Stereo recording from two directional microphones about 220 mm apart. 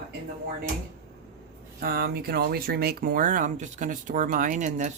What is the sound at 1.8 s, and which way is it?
Speech, 45° right (ahead or behind).